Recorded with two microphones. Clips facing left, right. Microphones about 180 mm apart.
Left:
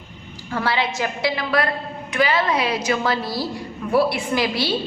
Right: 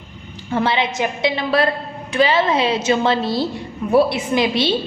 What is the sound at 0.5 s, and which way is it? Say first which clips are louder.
A woman's voice: right 4 dB; 20° right (ahead or behind).